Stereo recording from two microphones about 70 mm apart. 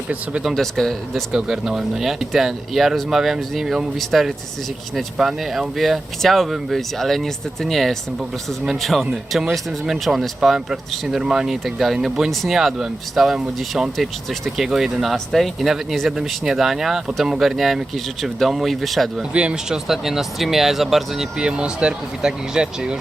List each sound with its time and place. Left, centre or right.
0.5 s speech: centre
1.3 s speech: centre
19.3 s speech: centre
19.9 s speech: centre